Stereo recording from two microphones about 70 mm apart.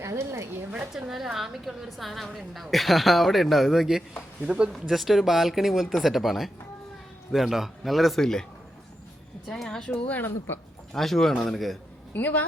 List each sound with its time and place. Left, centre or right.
0.0 s a woman's voice: right
0.9 s a woman's voice: centre
9.5 s a woman's voice: centre
10.1 s speech: left
10.9 s a woman's voice: centre
12.1 s speech: left